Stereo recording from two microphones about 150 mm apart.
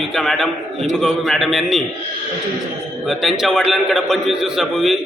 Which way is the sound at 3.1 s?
Centre (ahead or behind).